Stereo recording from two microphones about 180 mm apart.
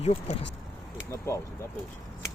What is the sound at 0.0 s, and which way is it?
Speech, 35° left (ahead or behind).